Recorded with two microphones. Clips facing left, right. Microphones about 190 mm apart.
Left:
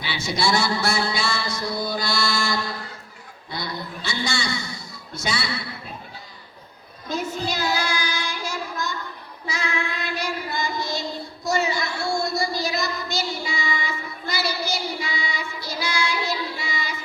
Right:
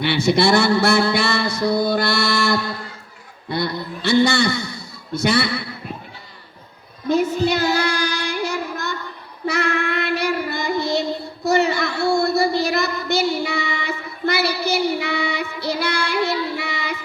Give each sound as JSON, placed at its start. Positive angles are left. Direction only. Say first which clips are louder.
{"t": 0.0, "sound": "music", "louder": "right 9 dB", "side_deg": -60}
{"t": 7.4, "sound": "child singing", "louder": "right 7 dB", "side_deg": -60}
{"t": 11.4, "sound": "a sound", "louder": "right 6 dB", "side_deg": -60}